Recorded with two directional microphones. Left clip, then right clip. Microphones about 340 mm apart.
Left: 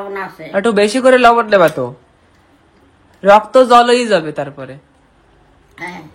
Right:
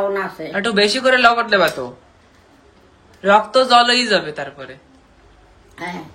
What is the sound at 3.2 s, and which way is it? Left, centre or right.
A man's voice, centre.